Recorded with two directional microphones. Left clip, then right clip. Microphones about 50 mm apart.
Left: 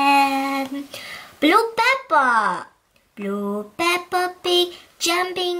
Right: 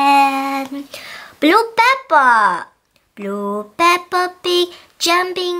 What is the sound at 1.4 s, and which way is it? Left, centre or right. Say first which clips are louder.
Speech: right 4 dB; right.